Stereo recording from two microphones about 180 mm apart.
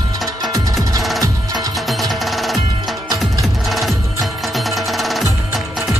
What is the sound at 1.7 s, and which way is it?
Music, centre (ahead or behind).